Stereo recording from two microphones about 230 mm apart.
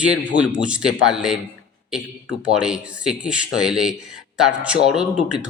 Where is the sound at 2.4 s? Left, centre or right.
Centre.